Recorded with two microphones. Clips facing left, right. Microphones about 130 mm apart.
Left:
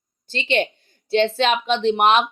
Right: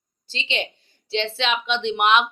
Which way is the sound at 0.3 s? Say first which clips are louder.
Left 7 dB; 55° left (ahead or behind).